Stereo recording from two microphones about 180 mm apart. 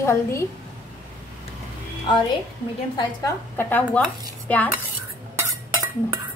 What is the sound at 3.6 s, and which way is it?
A woman's voice, 10° left (ahead or behind).